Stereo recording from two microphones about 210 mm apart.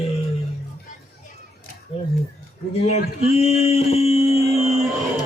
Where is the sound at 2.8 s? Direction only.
30° left (ahead or behind).